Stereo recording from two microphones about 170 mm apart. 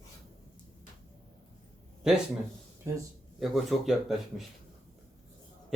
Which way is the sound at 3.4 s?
Centre (ahead or behind).